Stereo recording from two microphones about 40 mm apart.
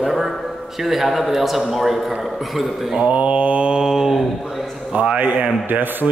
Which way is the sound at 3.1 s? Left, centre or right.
Right.